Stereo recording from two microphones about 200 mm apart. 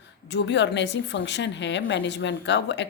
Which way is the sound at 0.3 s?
60° left (ahead or behind).